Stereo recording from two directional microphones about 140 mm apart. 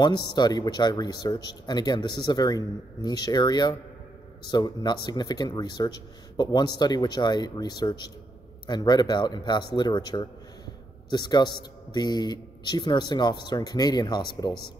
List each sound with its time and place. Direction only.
0.0 s a man's voice: 30° left (ahead or behind)